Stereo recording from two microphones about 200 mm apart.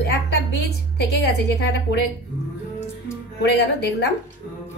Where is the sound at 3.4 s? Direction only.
55° left (ahead or behind).